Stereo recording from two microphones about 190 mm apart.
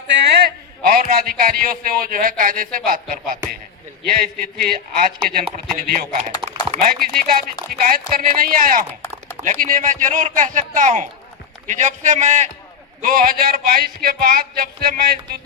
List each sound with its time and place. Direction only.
0.1 s a man's voice: 60° right (ahead or behind)